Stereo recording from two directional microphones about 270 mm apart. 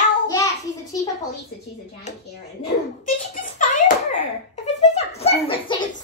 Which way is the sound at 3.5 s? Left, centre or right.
Left.